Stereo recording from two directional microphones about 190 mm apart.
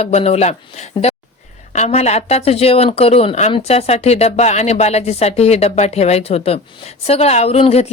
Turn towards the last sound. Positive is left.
turn(degrees=35)  # may be behind; listen again after turning